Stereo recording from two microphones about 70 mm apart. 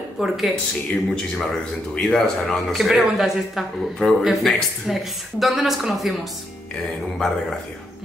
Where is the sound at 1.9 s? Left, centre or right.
Centre.